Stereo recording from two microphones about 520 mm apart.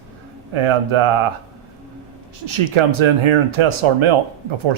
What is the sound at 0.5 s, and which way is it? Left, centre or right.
Speech, right.